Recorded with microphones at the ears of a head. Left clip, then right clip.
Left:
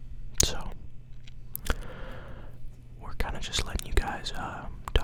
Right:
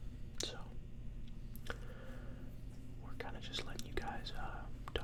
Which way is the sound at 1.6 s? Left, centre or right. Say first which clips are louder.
Left 12 dB; left.